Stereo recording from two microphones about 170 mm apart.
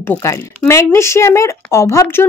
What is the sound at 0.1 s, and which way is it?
Speech, 15° left (ahead or behind).